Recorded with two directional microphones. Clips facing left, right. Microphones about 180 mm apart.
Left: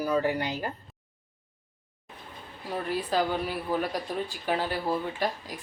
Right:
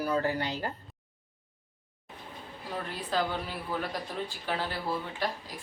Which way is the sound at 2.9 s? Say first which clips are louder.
Left 5 dB; 10° left (ahead or behind).